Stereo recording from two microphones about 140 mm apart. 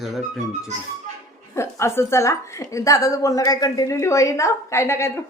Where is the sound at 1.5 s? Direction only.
20° left (ahead or behind).